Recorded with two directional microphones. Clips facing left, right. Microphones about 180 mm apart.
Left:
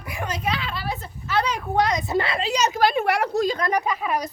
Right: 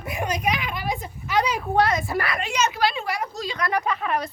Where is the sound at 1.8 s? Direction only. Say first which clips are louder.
Left 1 dB; 15° left (ahead or behind); by 3.5 s 65° left (ahead or behind).